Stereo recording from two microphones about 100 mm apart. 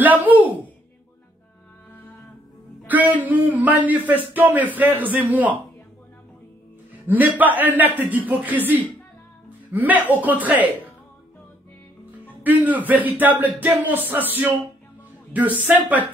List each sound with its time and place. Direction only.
0.0 s speech: 15° right (ahead or behind)
2.9 s speech: 15° right (ahead or behind)
7.1 s speech: 20° right (ahead or behind)
12.4 s speech: 15° right (ahead or behind)